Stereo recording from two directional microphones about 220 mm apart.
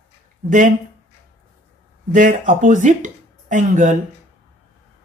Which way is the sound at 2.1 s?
35° right (ahead or behind).